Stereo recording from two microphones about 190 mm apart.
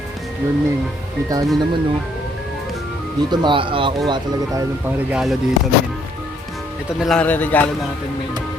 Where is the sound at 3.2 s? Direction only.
25° right (ahead or behind).